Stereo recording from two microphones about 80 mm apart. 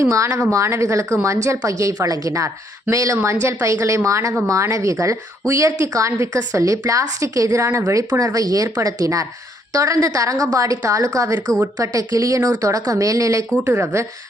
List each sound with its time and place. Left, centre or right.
0.0 s a woman's voice: right
13.7 s a woman's voice: right